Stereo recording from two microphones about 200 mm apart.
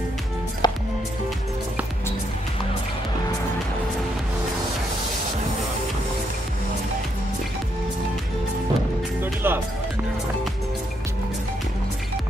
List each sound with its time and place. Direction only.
0.6 s music: 20° left (ahead or behind)
9.2 s music: 10° right (ahead or behind)